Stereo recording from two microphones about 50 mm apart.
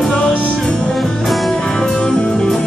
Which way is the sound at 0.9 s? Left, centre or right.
Centre.